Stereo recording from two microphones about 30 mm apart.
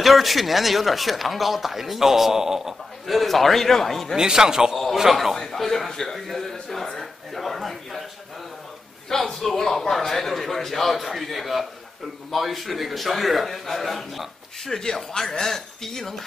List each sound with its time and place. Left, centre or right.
0.0 s speech: centre
3.1 s a man's voice: centre
4.2 s a man's voice: right
5.3 s a man's voice: centre
6.1 s a sound: centre
9.1 s a man's voice: centre
14.7 s a man's voice: centre